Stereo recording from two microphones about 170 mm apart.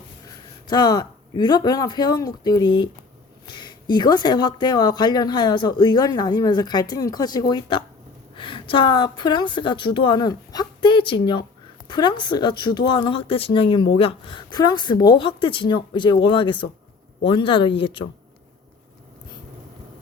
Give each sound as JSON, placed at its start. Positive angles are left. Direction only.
{"t": 0.7, "sound": "a woman's voice", "side_deg": 25}